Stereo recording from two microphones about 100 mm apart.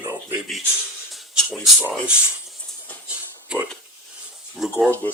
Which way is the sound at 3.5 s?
10° right (ahead or behind).